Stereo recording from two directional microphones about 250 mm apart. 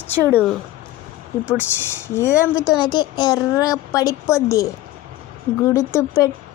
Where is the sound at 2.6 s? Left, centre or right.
Centre.